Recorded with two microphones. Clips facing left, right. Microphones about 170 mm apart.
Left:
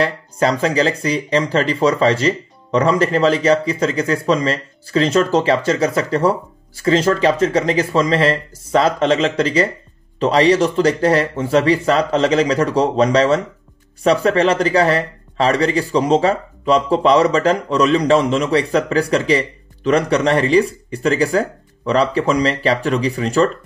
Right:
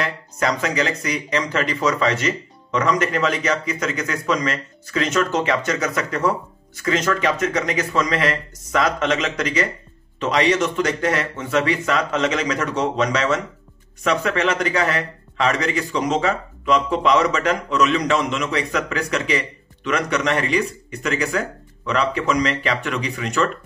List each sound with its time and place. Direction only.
0.0 s speech: 30° left (ahead or behind)